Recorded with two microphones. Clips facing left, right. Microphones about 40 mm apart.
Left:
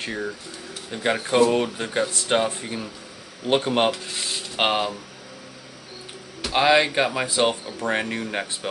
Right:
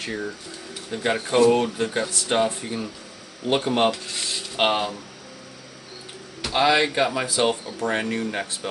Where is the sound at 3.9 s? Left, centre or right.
Centre.